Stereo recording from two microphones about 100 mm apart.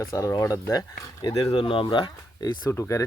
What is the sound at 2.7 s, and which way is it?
Speech, 30° left (ahead or behind).